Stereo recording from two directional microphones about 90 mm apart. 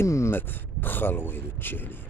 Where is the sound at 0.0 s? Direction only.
30° left (ahead or behind).